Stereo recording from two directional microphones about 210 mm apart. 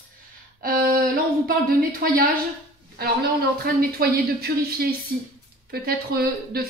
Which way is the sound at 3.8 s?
45° right (ahead or behind).